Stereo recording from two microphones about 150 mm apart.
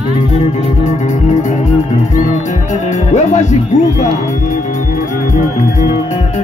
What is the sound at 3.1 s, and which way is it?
Music, 50° left (ahead or behind).